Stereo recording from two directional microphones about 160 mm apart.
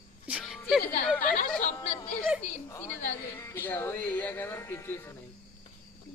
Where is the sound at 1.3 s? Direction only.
60° left (ahead or behind).